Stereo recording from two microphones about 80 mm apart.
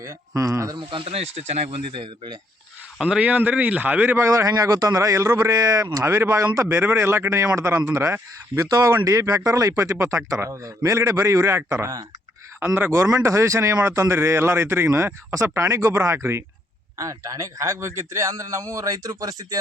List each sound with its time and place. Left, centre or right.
0.0 s a man's voice: right
0.8 s speech: right
3.0 s speech: centre
4.3 s a man's voice: right
13.1 s a man's voice: right